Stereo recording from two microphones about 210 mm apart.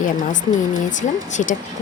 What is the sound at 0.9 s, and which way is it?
Speech, 35° left (ahead or behind).